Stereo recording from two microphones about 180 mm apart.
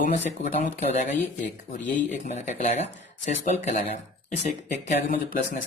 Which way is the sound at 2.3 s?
40° left (ahead or behind).